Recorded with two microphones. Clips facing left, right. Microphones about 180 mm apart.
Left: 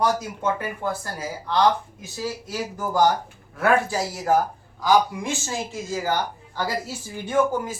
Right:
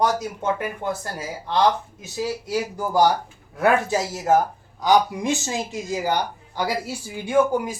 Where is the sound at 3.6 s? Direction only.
20° right (ahead or behind).